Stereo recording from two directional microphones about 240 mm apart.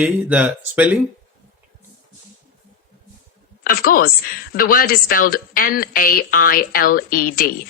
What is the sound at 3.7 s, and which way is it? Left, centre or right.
A woman's voice, left.